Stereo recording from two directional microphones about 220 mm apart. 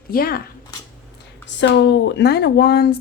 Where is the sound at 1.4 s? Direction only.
55° left (ahead or behind).